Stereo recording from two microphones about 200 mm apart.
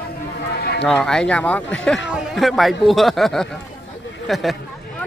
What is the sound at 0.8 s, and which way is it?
Speech, centre (ahead or behind).